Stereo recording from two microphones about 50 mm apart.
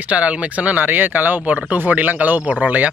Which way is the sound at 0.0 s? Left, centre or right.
Right.